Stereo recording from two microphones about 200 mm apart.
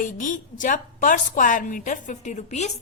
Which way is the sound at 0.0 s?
40° left (ahead or behind).